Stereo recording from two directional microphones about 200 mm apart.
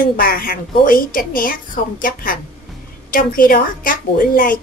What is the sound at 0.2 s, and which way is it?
A woman's voice, 45° left (ahead or behind).